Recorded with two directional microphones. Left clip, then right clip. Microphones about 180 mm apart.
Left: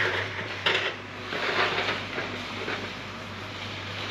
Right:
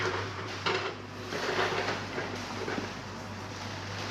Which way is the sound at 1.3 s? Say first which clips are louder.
Left 4 dB; 25° right (ahead or behind).